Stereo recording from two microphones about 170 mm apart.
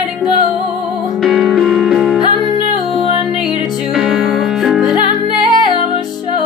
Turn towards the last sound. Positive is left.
turn(degrees=30)  # may be behind; listen again after turning